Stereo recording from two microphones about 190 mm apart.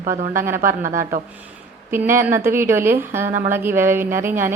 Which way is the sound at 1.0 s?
45° right (ahead or behind).